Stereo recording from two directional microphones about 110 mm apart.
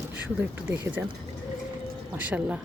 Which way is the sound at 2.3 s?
10° right (ahead or behind).